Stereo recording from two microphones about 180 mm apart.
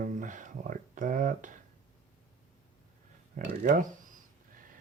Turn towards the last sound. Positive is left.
turn(degrees=-45)  # may be behind; listen again after turning